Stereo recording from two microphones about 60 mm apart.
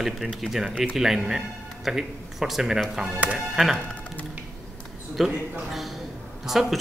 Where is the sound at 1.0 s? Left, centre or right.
Centre.